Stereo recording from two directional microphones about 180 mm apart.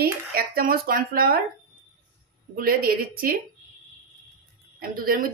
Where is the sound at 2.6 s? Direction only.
55° right (ahead or behind).